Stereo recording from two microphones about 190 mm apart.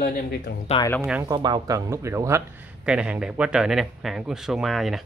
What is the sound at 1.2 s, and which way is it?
Speech, 20° right (ahead or behind).